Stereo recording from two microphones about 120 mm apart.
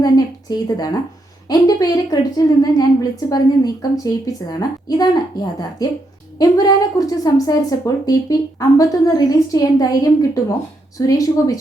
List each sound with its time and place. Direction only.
0.0 s a sound: 35° left (ahead or behind)
1.5 s a woman's voice: 35° left (ahead or behind)
6.4 s a woman's voice: 30° left (ahead or behind)